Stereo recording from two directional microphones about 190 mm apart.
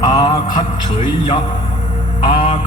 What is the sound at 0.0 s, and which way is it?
Music, 20° left (ahead or behind).